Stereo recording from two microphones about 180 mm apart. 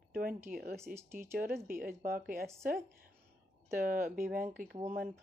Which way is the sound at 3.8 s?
50° right (ahead or behind).